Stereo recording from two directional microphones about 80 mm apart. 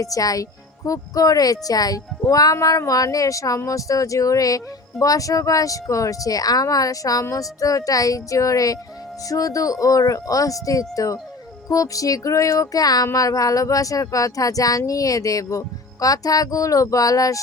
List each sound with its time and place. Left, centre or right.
0.0 s speech: left